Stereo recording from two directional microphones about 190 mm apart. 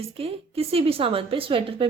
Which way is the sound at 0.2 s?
30° right (ahead or behind).